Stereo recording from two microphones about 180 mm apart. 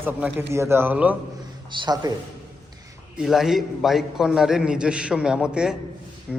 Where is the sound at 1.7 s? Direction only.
25° right (ahead or behind).